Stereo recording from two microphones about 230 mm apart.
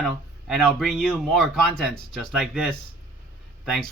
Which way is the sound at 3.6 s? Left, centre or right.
Centre.